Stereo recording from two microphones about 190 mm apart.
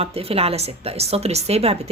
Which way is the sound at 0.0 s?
30° right (ahead or behind).